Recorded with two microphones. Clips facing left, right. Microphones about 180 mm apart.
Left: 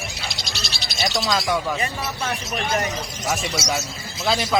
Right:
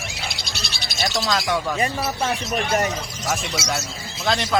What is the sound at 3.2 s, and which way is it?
Speech, centre (ahead or behind).